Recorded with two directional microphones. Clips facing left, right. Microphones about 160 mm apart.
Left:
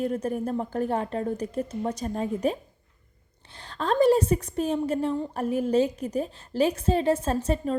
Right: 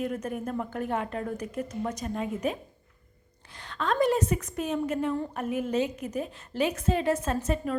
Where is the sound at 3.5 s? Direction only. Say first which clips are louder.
Left 3 dB; 35° left (ahead or behind).